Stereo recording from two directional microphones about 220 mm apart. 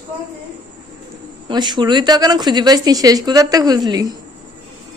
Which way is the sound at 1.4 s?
20° right (ahead or behind).